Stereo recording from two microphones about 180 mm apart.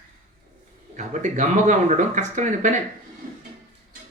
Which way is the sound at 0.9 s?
40° right (ahead or behind).